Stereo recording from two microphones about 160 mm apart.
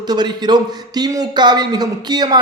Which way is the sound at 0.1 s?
25° right (ahead or behind).